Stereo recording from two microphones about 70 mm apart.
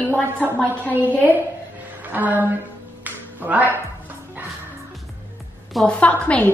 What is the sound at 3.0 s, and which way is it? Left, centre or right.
Music, right.